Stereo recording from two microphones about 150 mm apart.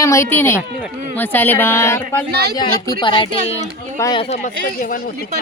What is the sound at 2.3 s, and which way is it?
Speech, 90° right.